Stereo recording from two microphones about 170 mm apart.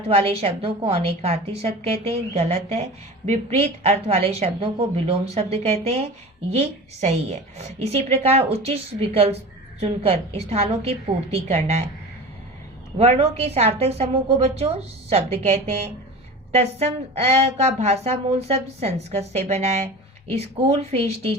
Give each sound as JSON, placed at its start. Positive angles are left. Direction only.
{"t": 0.1, "sound": "a woman's voice", "side_deg": -35}
{"t": 13.0, "sound": "a woman's voice", "side_deg": -35}